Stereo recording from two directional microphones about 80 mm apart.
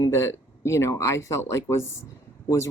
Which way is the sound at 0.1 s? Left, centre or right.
Left.